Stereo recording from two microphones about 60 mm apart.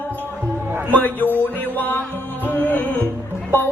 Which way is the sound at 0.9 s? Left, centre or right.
Left.